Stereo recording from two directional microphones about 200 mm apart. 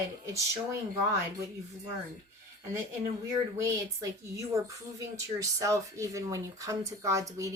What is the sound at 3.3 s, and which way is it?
Speech, 15° right (ahead or behind).